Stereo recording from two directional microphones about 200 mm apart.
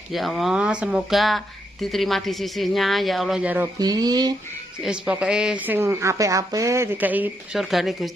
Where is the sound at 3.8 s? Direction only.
20° right (ahead or behind).